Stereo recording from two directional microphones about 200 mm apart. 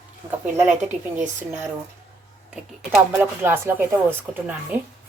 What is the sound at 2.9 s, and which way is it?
Speech, 10° right (ahead or behind).